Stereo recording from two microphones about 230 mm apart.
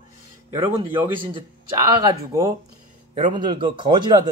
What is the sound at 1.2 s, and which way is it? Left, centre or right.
Speech, right.